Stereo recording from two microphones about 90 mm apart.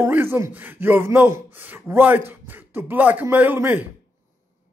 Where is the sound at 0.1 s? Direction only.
25° right (ahead or behind).